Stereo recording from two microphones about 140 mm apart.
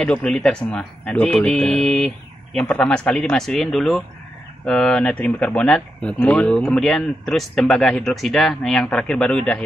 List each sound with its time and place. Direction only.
0.0 s speech: 5° left (ahead or behind)